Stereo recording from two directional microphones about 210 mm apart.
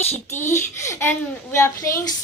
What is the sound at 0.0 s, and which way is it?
Speech, 30° left (ahead or behind).